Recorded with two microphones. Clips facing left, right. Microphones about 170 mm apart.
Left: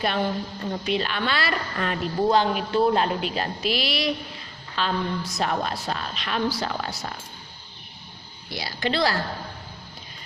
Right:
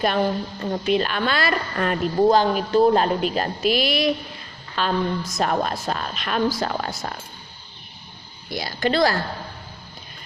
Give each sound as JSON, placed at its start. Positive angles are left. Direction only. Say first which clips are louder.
{"t": 0.0, "sound": "a woman's voice", "louder": "right 4 dB", "side_deg": -45}
{"t": 8.4, "sound": "a woman's voice", "louder": "right 4 dB", "side_deg": -50}